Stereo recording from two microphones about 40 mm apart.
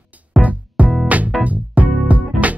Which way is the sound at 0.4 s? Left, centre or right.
Right.